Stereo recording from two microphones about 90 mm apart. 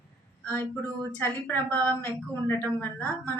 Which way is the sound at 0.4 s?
20° left (ahead or behind).